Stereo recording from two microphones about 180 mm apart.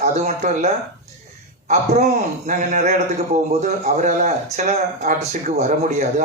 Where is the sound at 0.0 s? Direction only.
40° right (ahead or behind).